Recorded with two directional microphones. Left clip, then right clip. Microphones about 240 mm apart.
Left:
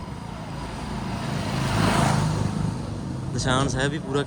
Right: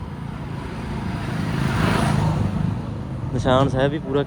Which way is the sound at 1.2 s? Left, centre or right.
Left.